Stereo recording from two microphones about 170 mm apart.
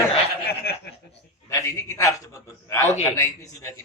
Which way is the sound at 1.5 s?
20° left (ahead or behind).